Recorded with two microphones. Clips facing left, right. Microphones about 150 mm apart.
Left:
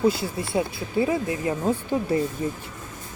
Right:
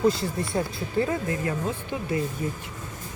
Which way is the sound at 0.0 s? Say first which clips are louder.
Left 1 dB; 5° left (ahead or behind).